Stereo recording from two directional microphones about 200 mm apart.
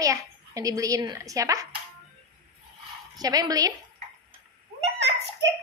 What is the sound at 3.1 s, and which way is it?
Speech, 20° right (ahead or behind).